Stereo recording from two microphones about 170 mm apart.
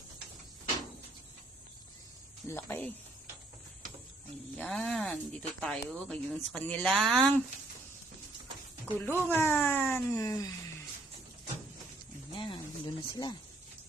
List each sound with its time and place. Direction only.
2.5 s speech: 10° left (ahead or behind)
4.5 s speech: 5° left (ahead or behind)
9.0 s speech: 10° left (ahead or behind)
12.3 s a sound: 30° left (ahead or behind)